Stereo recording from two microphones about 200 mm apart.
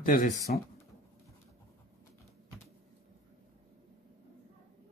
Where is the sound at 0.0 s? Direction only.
45° left (ahead or behind).